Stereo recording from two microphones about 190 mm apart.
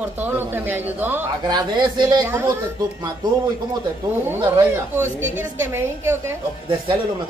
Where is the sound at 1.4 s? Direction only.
20° right (ahead or behind).